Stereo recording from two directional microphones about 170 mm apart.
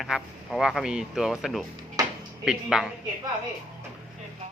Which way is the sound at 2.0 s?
20° right (ahead or behind).